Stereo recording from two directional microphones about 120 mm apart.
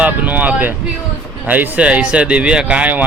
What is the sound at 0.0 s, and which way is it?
Speech, 10° right (ahead or behind).